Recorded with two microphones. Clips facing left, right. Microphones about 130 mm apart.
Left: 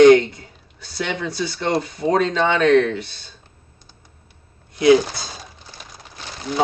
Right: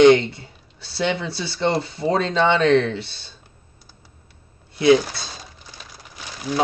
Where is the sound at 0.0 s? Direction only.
30° right (ahead or behind).